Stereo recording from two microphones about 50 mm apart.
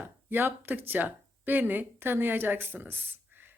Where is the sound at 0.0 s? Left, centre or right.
Right.